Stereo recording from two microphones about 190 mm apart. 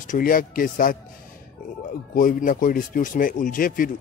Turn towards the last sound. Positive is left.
turn(degrees=45)  # may be behind; listen again after turning